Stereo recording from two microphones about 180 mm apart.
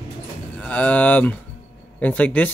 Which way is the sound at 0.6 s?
5° left (ahead or behind).